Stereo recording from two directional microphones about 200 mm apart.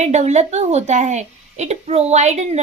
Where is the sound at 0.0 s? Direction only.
35° right (ahead or behind).